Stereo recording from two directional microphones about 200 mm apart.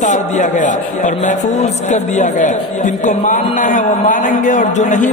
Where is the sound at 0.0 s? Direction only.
35° left (ahead or behind).